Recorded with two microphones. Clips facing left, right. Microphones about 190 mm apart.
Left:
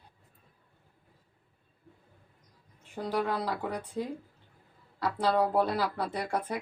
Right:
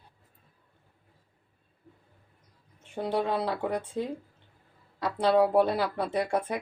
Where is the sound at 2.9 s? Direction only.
25° right (ahead or behind).